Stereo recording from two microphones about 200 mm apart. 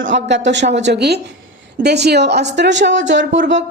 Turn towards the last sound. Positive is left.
turn(degrees=-60)  # may be behind; listen again after turning